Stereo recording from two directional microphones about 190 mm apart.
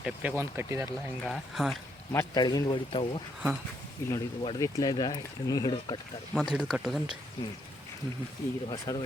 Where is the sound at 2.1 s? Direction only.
20° left (ahead or behind).